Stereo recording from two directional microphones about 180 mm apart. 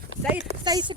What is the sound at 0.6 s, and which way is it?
Speech, 25° right (ahead or behind).